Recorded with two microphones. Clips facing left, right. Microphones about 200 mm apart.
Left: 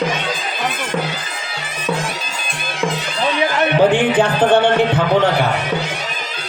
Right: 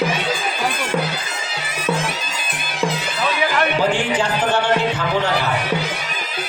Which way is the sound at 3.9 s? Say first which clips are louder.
Left 5 dB; 55° left (ahead or behind).